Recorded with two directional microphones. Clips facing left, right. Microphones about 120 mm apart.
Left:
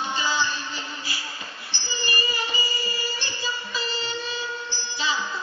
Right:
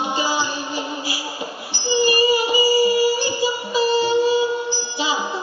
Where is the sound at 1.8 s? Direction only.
15° right (ahead or behind).